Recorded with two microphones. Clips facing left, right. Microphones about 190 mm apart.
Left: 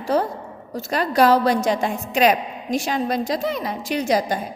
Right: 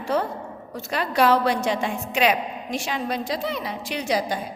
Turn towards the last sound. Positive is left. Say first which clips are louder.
# left 4 dB
turn(degrees=45)  # may be behind; listen again after turning